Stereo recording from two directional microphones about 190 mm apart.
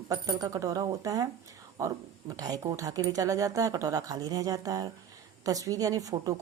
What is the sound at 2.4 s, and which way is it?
A woman's voice, 20° right (ahead or behind).